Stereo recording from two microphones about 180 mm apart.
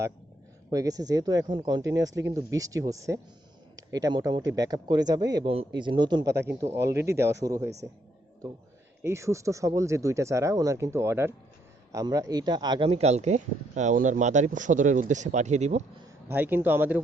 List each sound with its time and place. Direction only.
0.7 s speech: 20° right (ahead or behind)
9.0 s speech: 15° right (ahead or behind)
12.9 s speech: 35° right (ahead or behind)
16.3 s speech: 10° right (ahead or behind)